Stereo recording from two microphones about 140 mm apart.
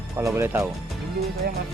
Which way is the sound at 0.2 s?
20° right (ahead or behind).